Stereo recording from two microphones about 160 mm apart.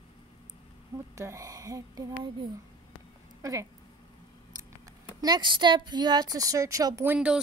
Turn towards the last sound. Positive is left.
turn(degrees=-5)  # may be behind; listen again after turning